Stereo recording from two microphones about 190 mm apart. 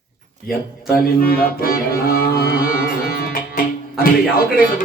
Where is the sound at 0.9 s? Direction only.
50° left (ahead or behind).